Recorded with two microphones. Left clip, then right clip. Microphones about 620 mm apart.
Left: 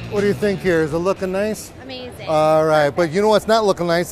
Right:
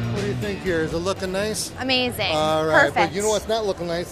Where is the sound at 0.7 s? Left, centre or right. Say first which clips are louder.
Left 4 dB; left.